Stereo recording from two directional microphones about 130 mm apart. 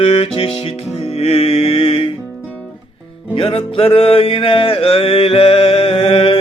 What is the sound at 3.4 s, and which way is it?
Music, 45° left (ahead or behind).